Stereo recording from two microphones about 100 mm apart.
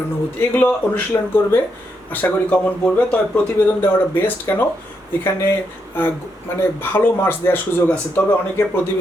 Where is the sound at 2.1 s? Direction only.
15° left (ahead or behind).